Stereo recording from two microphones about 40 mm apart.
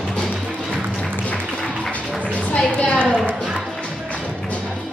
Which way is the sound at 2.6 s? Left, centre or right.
Left.